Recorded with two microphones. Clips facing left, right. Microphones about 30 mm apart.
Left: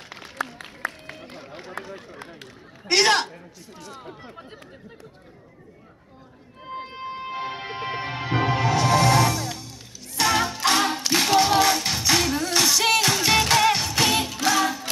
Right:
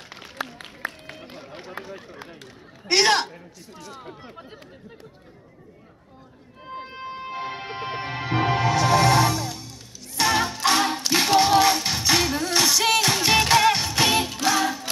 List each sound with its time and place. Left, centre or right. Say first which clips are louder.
2.9 s a man's voice: even; centre
4.0 s chatter: even; centre
6.9 s music: even; centre
10.1 s music: even; centre
11.1 s a capella: right 1 dB; centre
11.6 s music: right 1 dB; centre
13.1 s music: right 1 dB; centre